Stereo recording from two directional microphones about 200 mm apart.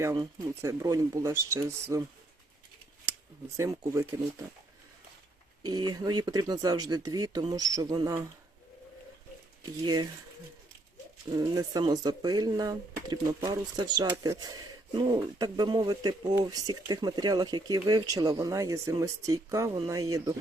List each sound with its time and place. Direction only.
0.0 s speech: 15° right (ahead or behind)
3.6 s speech: 15° right (ahead or behind)
5.6 s speech: 20° right (ahead or behind)
9.8 s speech: 20° right (ahead or behind)
11.3 s speech: 20° right (ahead or behind)